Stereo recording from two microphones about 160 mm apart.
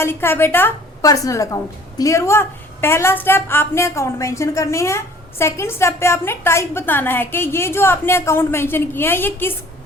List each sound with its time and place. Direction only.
0.0 s a woman's voice: 15° left (ahead or behind)